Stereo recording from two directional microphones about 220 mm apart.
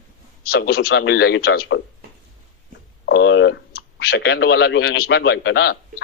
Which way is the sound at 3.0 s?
55° left (ahead or behind).